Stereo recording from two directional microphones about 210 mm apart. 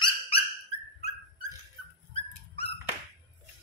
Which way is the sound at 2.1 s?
30° left (ahead or behind).